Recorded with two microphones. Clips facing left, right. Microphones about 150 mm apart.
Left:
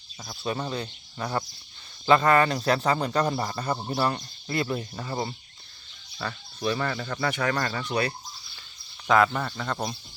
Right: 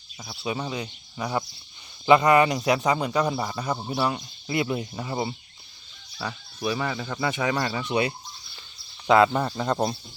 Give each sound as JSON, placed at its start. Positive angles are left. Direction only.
{"t": 0.2, "sound": "speech", "side_deg": -5}